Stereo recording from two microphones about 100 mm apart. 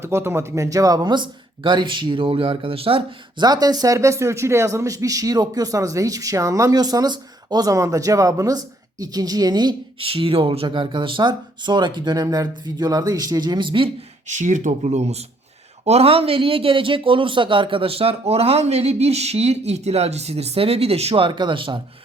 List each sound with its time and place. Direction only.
0.0 s speech: 25° right (ahead or behind); by 3.4 s 65° right (ahead or behind)
3.4 s speech: 40° right (ahead or behind)
10.0 s speech: 65° right (ahead or behind)
14.7 s a man's voice: 90° right
21.2 s speech: 50° right (ahead or behind)